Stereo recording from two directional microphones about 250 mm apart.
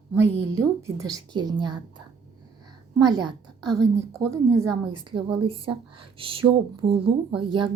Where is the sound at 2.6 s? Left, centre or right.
Centre.